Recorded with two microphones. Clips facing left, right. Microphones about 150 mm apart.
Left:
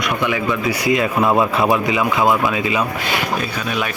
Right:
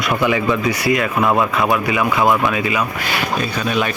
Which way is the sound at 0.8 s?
20° left (ahead or behind).